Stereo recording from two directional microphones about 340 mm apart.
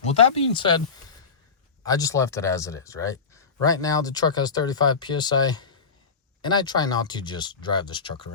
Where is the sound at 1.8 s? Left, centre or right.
Centre.